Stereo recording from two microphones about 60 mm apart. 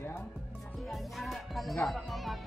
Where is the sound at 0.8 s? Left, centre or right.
Centre.